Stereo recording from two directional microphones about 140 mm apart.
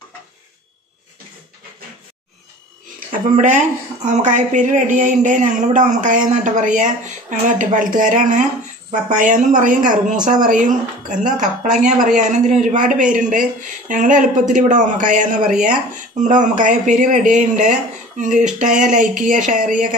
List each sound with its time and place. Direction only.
3.1 s speech: 65° right (ahead or behind)